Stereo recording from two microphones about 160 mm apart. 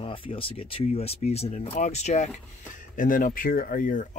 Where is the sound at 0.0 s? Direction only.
35° left (ahead or behind).